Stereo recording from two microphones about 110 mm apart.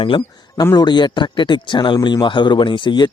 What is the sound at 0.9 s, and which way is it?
Speech, 45° left (ahead or behind).